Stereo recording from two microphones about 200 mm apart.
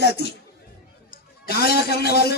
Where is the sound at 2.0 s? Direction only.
50° left (ahead or behind).